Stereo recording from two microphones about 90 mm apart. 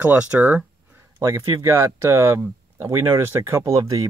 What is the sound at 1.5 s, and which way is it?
Speech, 25° right (ahead or behind).